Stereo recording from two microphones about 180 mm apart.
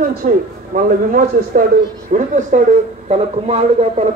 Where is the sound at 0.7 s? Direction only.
50° right (ahead or behind).